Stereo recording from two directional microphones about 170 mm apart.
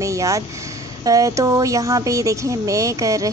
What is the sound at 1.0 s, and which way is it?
Speech, 20° right (ahead or behind).